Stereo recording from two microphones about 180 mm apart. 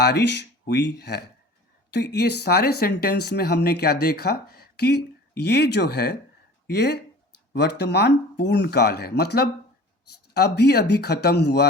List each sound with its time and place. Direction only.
0.0 s speech: 70° left (ahead or behind)